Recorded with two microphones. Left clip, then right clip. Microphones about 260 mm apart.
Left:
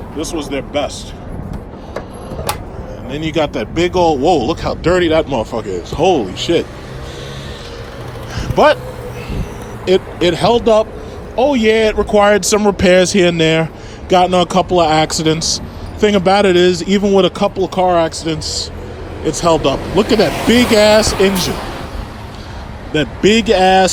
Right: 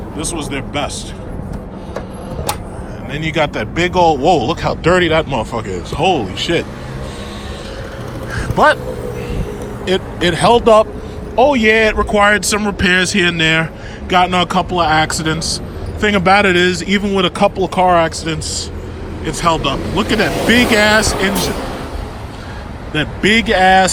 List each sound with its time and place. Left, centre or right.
0.2 s a man's voice: centre
3.1 s a man's voice: centre
8.4 s a sound: centre
9.8 s a man's voice: centre
22.9 s a man's voice: centre